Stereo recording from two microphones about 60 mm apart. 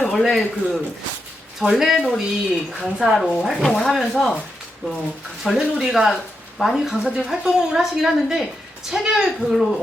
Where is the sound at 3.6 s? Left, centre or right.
Centre.